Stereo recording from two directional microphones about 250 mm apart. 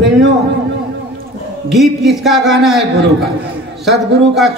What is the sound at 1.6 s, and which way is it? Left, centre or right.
Music, centre.